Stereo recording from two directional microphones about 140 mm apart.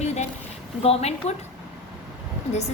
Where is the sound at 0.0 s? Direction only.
50° left (ahead or behind).